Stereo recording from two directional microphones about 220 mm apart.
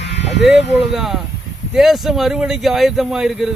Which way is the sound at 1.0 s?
Centre (ahead or behind).